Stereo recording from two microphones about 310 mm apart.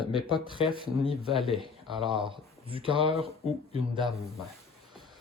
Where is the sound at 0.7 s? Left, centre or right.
Centre.